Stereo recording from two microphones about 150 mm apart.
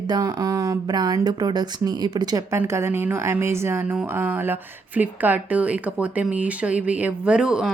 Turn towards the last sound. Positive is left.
turn(degrees=-5)  # may be behind; listen again after turning